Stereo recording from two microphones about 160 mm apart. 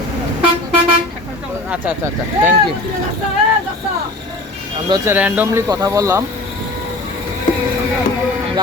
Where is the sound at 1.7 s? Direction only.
10° right (ahead or behind).